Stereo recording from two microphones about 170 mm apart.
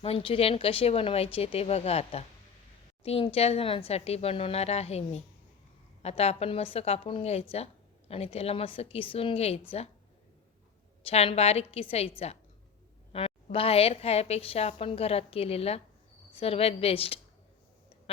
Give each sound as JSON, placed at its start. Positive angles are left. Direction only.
{"t": 0.0, "sound": "a woman's voice", "side_deg": 35}
{"t": 11.0, "sound": "a woman's voice", "side_deg": 35}